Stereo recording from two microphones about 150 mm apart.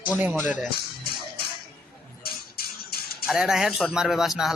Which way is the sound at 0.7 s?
90° left.